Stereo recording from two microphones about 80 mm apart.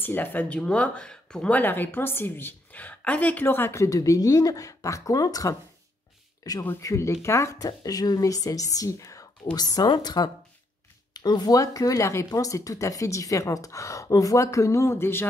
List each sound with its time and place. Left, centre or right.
0.0 s speech: left
1.6 s a woman's voice: left
3.4 s speech: left
6.8 s speech: left
9.4 s speech: left
9.7 s speech: left